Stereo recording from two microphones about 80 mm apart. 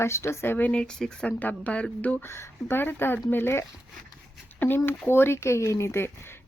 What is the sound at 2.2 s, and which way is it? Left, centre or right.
Speech, left.